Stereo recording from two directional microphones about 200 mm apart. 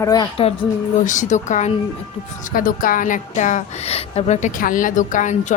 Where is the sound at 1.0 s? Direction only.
40° left (ahead or behind).